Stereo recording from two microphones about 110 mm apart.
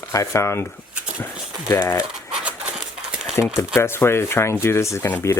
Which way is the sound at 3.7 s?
20° left (ahead or behind).